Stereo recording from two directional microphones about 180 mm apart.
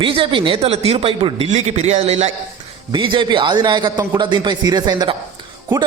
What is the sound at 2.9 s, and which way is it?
A man's voice, 25° right (ahead or behind).